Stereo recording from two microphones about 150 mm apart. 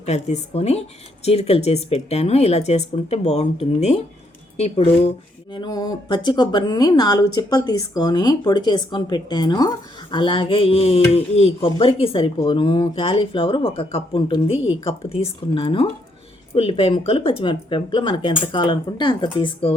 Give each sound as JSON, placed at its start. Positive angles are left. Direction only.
{"t": 0.0, "sound": "speech", "side_deg": 45}
{"t": 5.5, "sound": "speech", "side_deg": 25}